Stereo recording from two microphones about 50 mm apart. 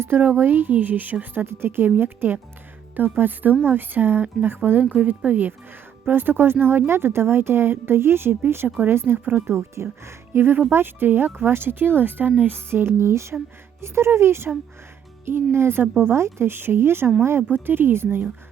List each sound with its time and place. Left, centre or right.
0.0 s speech: right
4.9 s speech: right
9.5 s speech: right